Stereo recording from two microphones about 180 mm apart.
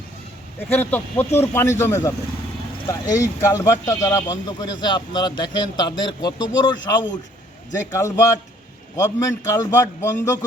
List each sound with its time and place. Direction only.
0.7 s a man's voice: 10° left (ahead or behind)
7.9 s a man's voice: 15° left (ahead or behind)